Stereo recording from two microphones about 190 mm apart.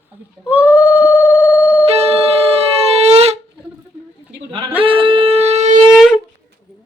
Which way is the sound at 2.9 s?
35° right (ahead or behind).